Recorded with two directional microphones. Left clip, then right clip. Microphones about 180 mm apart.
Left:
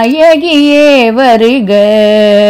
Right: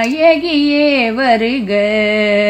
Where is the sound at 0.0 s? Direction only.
55° left (ahead or behind).